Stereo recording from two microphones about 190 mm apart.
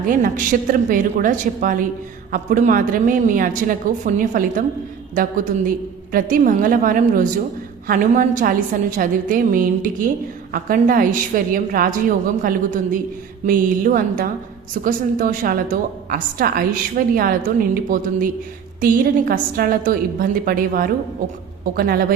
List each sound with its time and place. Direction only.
0.1 s a woman's voice: 45° right (ahead or behind)